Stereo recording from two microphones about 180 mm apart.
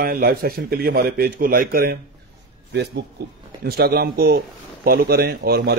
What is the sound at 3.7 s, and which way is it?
Speech, 60° right (ahead or behind).